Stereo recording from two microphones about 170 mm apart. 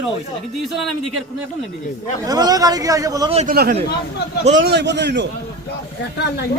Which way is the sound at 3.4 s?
65° right (ahead or behind).